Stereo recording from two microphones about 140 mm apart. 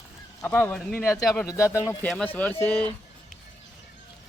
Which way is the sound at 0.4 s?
10° left (ahead or behind).